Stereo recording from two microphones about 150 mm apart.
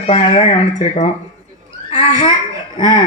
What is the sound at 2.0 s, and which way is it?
A woman's voice, 30° left (ahead or behind).